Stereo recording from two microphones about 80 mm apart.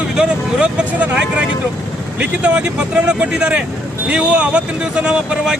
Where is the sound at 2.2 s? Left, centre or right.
Centre.